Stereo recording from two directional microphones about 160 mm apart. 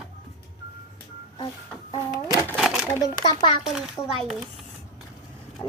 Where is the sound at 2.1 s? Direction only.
25° left (ahead or behind).